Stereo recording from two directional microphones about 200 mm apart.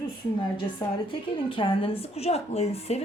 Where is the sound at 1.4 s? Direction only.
25° left (ahead or behind).